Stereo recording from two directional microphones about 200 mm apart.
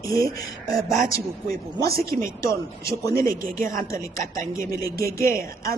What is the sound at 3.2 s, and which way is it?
Speech, 45° right (ahead or behind).